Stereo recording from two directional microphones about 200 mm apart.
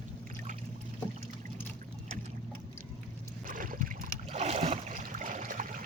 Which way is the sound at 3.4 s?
45° right (ahead or behind).